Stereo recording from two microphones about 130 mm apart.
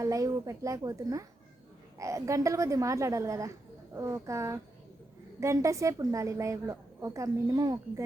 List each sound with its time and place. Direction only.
0.0 s a woman's voice: 25° right (ahead or behind)